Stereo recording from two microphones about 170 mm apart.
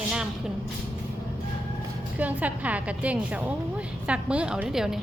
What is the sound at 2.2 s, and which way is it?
A woman's voice, 10° right (ahead or behind).